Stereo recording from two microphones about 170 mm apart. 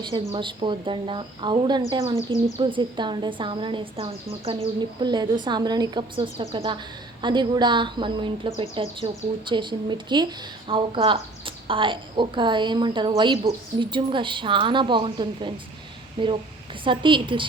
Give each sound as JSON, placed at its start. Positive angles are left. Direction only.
{"t": 0.3, "sound": "speech", "side_deg": -30}